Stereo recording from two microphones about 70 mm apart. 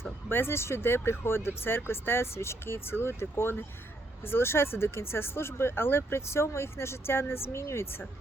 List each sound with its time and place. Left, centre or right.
0.3 s speech: left